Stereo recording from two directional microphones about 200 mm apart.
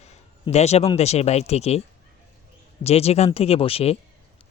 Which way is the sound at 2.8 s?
30° left (ahead or behind).